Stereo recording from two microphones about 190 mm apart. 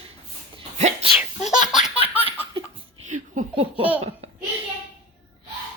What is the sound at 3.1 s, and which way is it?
Laughter, 35° right (ahead or behind).